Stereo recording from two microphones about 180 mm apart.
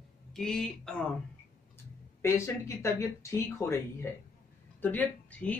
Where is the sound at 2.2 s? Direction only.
15° left (ahead or behind).